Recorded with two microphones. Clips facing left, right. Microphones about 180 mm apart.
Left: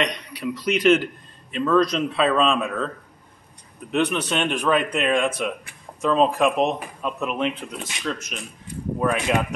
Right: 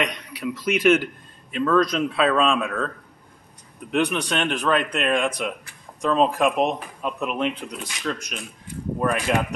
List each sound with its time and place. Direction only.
0.0 s a man's voice: 5° right (ahead or behind)
3.9 s a man's voice: centre (ahead or behind)